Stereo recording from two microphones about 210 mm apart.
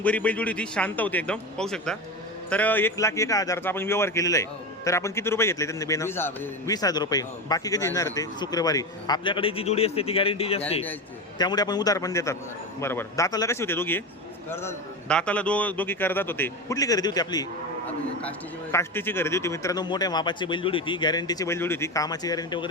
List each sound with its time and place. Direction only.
0.0 s a man's voice: 5° left (ahead or behind)
17.8 s a man's voice: 5° left (ahead or behind)